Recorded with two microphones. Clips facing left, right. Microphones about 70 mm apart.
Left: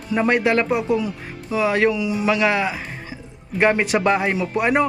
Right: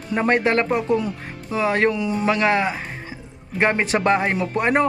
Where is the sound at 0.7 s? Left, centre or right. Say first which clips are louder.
Even; centre.